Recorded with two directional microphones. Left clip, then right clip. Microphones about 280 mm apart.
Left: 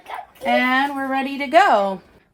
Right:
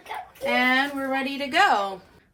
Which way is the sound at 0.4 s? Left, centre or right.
Left.